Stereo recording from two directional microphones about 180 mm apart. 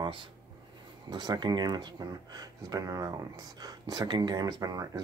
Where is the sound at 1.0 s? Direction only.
25° right (ahead or behind).